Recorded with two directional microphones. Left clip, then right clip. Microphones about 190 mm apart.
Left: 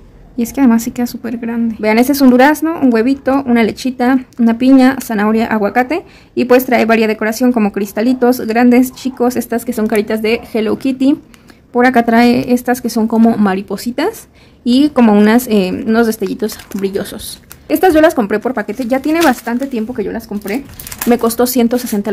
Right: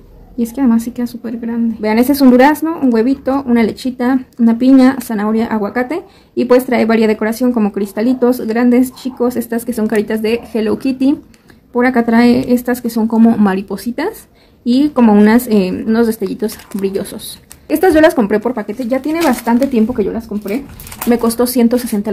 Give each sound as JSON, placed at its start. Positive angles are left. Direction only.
{"t": 0.4, "sound": "a woman's voice", "side_deg": 25}
{"t": 20.0, "sound": "speech", "side_deg": 45}
{"t": 21.1, "sound": "a woman's voice", "side_deg": 25}